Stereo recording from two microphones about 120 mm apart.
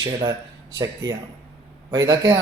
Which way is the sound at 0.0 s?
30° right (ahead or behind).